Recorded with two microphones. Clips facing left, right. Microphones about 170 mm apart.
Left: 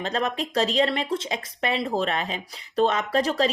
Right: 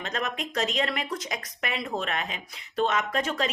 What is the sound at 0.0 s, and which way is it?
Speech, 30° left (ahead or behind).